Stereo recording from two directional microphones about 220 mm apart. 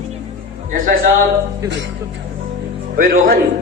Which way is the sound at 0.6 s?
40° right (ahead or behind).